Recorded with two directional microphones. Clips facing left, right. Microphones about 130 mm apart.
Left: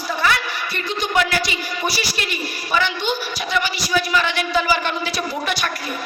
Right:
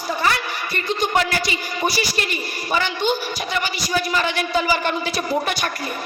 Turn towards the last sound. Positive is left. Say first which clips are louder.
# right 2 dB
turn(degrees=-45)  # may be behind; listen again after turning